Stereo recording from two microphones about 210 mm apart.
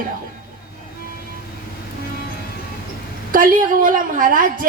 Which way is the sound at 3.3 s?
40° right (ahead or behind).